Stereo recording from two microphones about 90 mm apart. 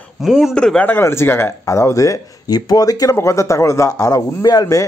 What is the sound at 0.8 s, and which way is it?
Speech, 25° left (ahead or behind).